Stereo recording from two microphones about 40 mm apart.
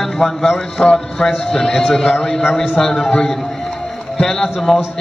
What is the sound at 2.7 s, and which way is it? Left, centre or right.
Speech, centre.